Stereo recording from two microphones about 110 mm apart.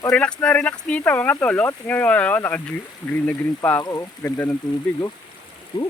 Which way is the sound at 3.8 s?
35° left (ahead or behind).